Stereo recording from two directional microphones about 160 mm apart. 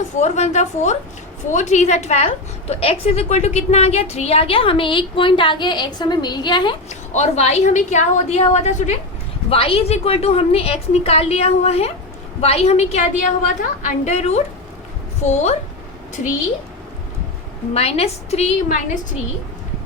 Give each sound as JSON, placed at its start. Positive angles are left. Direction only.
{"t": 0.2, "sound": "a woman's voice", "side_deg": 45}
{"t": 7.1, "sound": "a woman's voice", "side_deg": 45}
{"t": 17.7, "sound": "a woman's voice", "side_deg": 40}